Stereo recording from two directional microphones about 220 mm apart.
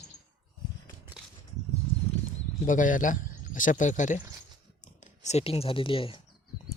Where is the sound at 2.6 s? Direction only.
35° left (ahead or behind).